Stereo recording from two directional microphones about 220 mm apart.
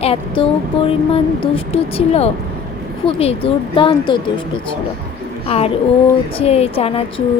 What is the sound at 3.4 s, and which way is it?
Speech, 25° left (ahead or behind).